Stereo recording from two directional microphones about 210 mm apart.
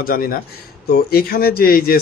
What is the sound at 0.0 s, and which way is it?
Speech, 45° left (ahead or behind).